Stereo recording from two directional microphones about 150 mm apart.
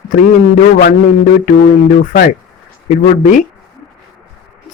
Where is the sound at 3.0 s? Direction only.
60° left (ahead or behind).